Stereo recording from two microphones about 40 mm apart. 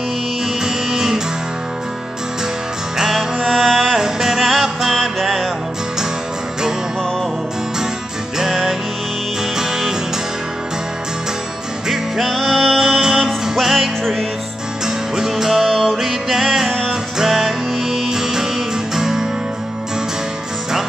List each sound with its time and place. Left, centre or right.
0.7 s music: centre
3.0 s music: centre
4.0 s music: centre
9.6 s music: centre
11.9 s music: centre
15.1 s music: centre